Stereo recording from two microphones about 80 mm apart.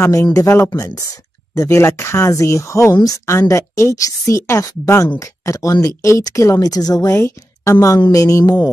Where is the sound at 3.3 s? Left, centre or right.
Left.